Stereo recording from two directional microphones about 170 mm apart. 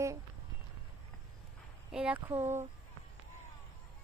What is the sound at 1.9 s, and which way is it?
Speech, 5° right (ahead or behind).